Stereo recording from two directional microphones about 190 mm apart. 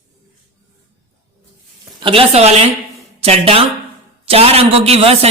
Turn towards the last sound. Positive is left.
turn(degrees=-30)  # may be behind; listen again after turning